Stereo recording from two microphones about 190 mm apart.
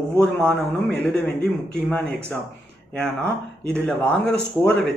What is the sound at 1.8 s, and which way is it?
A man's voice, centre (ahead or behind).